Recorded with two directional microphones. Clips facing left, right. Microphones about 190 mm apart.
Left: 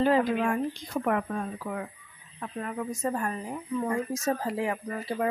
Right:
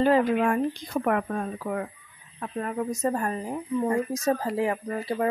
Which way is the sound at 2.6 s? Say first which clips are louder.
Right 4 dB; 40° right (ahead or behind).